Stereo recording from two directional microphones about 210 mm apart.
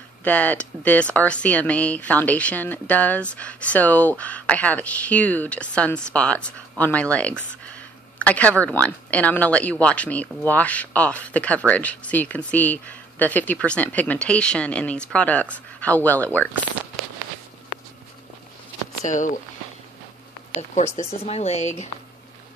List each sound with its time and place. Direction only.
0.2 s speech: 5° left (ahead or behind)
19.0 s speech: 35° left (ahead or behind)
20.7 s speech: 35° left (ahead or behind)